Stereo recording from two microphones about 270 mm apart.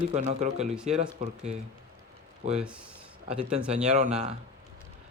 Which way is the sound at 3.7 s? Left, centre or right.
Right.